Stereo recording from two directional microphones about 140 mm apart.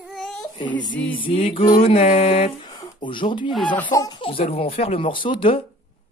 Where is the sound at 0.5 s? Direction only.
35° left (ahead or behind).